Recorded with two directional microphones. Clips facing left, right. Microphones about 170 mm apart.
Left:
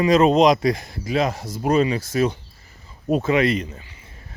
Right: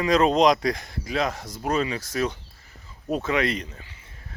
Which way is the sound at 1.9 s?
25° left (ahead or behind).